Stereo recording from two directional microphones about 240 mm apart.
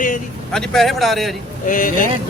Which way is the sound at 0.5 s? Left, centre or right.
Centre.